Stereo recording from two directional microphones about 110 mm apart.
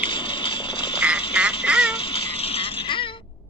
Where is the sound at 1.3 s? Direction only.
10° right (ahead or behind).